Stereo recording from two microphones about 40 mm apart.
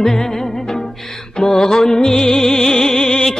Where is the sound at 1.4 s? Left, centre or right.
Centre.